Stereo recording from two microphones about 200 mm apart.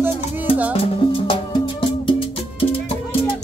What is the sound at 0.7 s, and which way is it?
Music, 30° left (ahead or behind).